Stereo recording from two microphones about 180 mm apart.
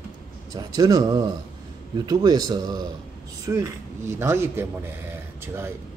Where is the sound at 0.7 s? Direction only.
20° right (ahead or behind).